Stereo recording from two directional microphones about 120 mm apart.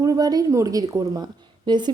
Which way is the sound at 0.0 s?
30° right (ahead or behind).